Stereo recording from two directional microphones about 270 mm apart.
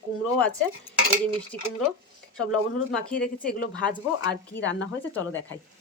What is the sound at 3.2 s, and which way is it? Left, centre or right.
Speech, centre.